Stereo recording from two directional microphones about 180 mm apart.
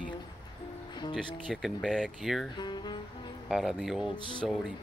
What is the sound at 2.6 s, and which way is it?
Music, 25° left (ahead or behind).